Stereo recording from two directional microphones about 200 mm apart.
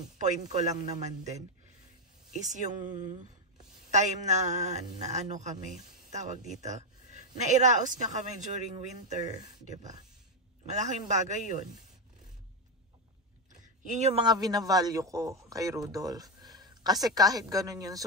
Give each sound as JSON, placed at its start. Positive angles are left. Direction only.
{"t": 0.2, "sound": "speech", "side_deg": -35}
{"t": 3.9, "sound": "speech", "side_deg": -35}
{"t": 10.7, "sound": "speech", "side_deg": -35}
{"t": 13.9, "sound": "speech", "side_deg": -35}
{"t": 14.2, "sound": "a man's voice", "side_deg": -20}